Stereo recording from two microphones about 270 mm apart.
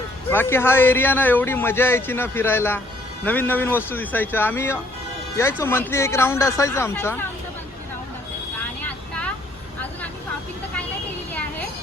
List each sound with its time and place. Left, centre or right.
0.3 s a man's voice: centre
8.8 s vehicle: centre